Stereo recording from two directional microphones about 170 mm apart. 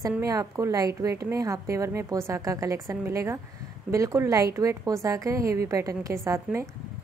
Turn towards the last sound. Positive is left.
turn(degrees=-15)  # may be behind; listen again after turning